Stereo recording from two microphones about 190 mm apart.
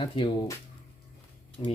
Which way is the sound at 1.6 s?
25° left (ahead or behind).